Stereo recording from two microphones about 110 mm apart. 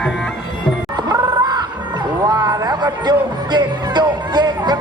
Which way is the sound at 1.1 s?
40° right (ahead or behind).